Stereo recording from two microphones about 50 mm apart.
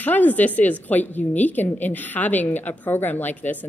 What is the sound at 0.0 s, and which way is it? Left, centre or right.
A woman's voice, left.